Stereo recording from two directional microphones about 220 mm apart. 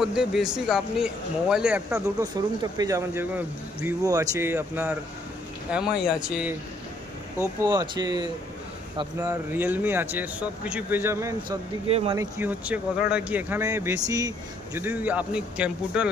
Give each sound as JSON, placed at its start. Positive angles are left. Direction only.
{"t": 0.0, "sound": "speech", "side_deg": -5}
{"t": 2.6, "sound": "speech", "side_deg": -15}
{"t": 7.6, "sound": "speech", "side_deg": -20}
{"t": 11.9, "sound": "speech", "side_deg": -25}
{"t": 12.2, "sound": "speech", "side_deg": -10}